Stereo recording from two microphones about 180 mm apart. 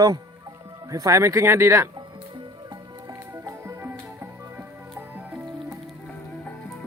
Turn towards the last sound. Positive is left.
turn(degrees=-10)  # may be behind; listen again after turning